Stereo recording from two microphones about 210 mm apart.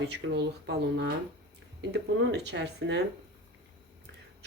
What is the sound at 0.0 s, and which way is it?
Speech, 55° right (ahead or behind).